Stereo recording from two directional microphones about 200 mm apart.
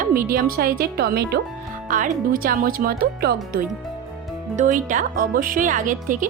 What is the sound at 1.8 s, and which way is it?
A woman's voice, 40° right (ahead or behind).